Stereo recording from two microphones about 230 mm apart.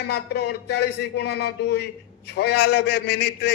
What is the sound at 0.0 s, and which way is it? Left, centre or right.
Music, left.